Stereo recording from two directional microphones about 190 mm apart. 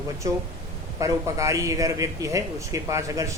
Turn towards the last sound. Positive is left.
turn(degrees=-15)  # may be behind; listen again after turning